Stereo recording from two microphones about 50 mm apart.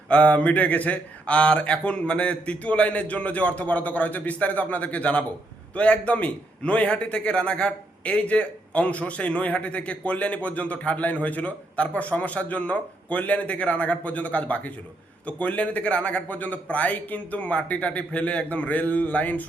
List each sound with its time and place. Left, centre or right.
0.1 s a man's voice: left